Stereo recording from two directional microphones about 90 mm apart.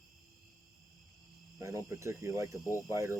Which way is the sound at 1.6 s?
35° right (ahead or behind).